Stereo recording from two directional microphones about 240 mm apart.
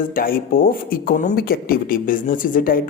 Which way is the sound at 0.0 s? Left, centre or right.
Left.